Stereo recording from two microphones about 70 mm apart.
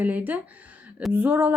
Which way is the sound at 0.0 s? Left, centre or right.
Right.